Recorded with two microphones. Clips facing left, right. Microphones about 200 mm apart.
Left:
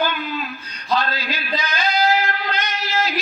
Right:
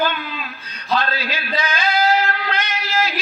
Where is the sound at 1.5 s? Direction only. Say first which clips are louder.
Right 1 dB; 55° right (ahead or behind).